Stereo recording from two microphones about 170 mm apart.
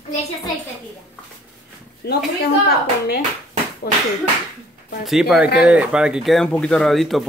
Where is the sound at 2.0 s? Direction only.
75° left (ahead or behind).